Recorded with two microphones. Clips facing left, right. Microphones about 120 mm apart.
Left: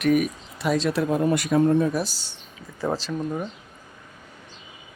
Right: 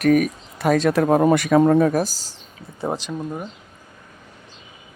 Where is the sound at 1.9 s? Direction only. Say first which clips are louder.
Right 5 dB; 40° right (ahead or behind).